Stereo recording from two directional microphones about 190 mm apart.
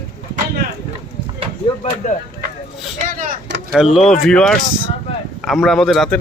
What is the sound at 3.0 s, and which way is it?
Vehicle, 45° right (ahead or behind).